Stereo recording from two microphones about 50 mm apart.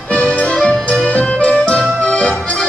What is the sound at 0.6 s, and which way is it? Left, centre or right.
Accordion, left.